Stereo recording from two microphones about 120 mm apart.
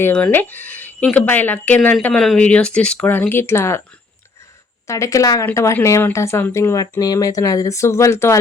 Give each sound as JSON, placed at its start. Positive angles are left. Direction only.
{"t": 0.0, "sound": "speech", "side_deg": 15}
{"t": 4.9, "sound": "speech", "side_deg": 25}